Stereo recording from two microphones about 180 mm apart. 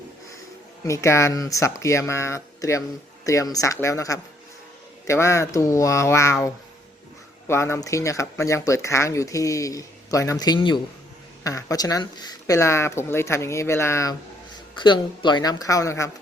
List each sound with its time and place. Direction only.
0.9 s speech: 15° left (ahead or behind)
7.4 s speech: 15° left (ahead or behind)